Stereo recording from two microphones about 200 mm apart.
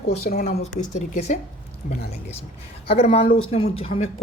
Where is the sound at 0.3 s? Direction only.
35° left (ahead or behind).